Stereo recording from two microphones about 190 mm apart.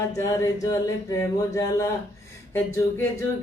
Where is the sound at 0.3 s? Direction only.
20° left (ahead or behind).